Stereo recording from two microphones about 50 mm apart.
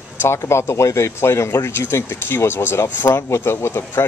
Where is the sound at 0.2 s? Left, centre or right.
Left.